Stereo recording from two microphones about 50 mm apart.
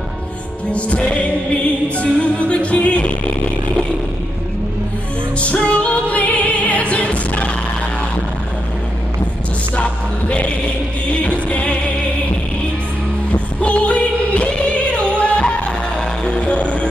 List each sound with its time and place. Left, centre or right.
0.7 s music: left
5.4 s music: left
9.8 s music: left
13.3 s music: left